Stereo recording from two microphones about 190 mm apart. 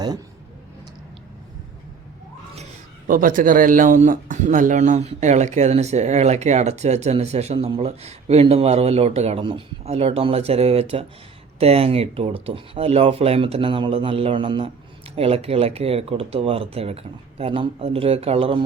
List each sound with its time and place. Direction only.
3.1 s speech: 45° right (ahead or behind); by 18.6 s 30° right (ahead or behind)